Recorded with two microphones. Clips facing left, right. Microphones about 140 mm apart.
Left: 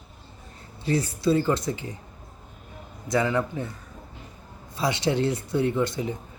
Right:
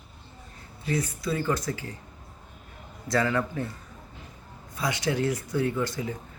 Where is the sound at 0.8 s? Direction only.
30° left (ahead or behind).